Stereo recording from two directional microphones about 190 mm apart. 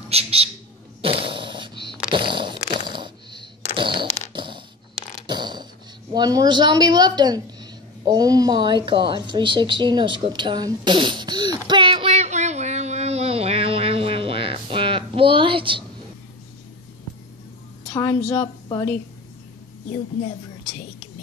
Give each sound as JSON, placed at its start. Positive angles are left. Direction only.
{"t": 0.1, "sound": "speech", "side_deg": -30}
{"t": 1.0, "sound": "dog", "side_deg": -30}
{"t": 2.0, "sound": "a sound", "side_deg": -25}
{"t": 6.1, "sound": "speech", "side_deg": -20}
{"t": 9.1, "sound": "a sound", "side_deg": -25}
{"t": 17.8, "sound": "a woman's voice", "side_deg": 15}